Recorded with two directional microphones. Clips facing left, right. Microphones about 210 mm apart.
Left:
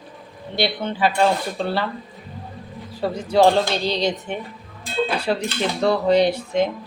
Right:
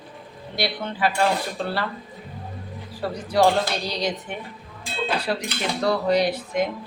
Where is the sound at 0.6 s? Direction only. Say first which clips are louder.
Left 4 dB; 25° left (ahead or behind).